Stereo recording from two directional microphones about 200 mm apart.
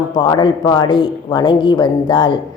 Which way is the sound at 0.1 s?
20° left (ahead or behind).